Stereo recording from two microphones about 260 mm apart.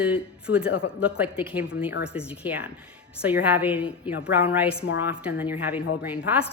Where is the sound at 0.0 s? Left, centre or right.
Centre.